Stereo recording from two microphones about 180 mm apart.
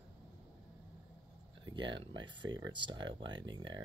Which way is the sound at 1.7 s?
25° right (ahead or behind).